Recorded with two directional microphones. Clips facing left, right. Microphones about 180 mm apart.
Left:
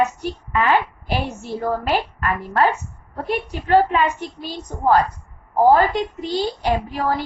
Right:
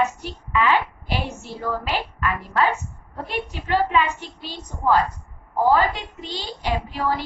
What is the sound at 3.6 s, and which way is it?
A woman's voice, 45° left (ahead or behind).